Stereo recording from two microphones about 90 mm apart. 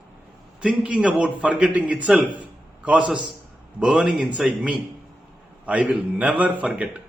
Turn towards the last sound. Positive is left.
turn(degrees=-15)  # may be behind; listen again after turning